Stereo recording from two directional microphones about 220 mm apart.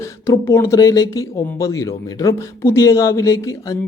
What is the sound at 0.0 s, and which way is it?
Speech, 10° left (ahead or behind).